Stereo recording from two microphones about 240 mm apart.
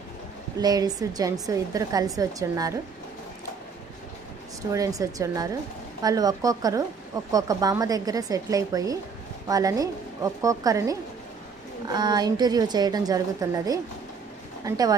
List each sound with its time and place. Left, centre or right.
0.6 s a woman's voice: centre
4.7 s a woman's voice: centre